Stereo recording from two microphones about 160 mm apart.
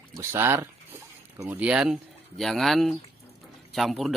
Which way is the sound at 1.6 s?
5° right (ahead or behind).